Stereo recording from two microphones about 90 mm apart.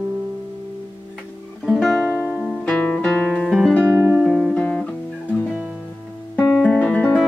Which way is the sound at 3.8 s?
15° right (ahead or behind).